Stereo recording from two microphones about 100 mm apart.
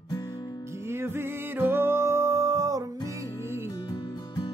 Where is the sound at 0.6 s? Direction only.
25° right (ahead or behind).